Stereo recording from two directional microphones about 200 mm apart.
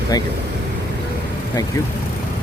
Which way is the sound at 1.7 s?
15° left (ahead or behind).